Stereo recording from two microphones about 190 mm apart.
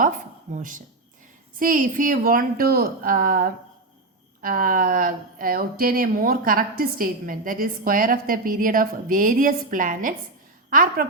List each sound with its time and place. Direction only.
0.0 s a woman's voice: 45° right (ahead or behind)